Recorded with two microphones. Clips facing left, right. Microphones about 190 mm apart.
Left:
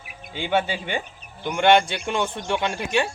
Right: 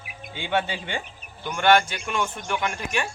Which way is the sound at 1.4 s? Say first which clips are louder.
Left 2 dB; 20° left (ahead or behind).